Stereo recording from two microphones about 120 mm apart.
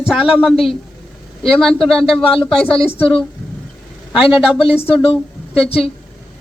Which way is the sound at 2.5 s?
50° left (ahead or behind).